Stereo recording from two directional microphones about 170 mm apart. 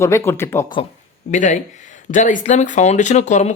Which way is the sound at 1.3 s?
45° left (ahead or behind).